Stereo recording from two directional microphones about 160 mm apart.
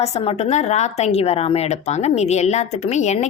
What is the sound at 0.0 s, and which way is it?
Speech, 40° left (ahead or behind).